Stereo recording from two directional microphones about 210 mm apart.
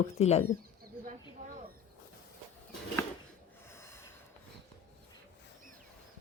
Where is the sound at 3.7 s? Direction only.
15° left (ahead or behind).